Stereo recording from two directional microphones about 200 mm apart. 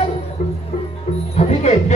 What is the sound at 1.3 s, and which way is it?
Speech, 35° left (ahead or behind).